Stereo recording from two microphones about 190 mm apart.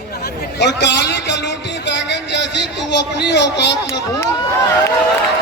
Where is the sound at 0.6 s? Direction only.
65° left (ahead or behind).